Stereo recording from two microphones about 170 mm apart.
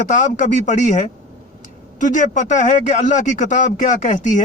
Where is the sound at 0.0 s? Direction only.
45° left (ahead or behind).